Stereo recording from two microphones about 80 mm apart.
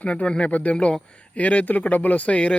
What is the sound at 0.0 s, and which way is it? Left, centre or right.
Speech, centre.